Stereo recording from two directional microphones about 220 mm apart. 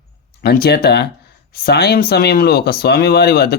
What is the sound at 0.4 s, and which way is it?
Speech, 45° left (ahead or behind).